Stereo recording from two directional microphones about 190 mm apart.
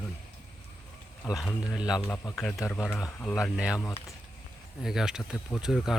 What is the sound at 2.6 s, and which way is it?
Speech, 15° left (ahead or behind).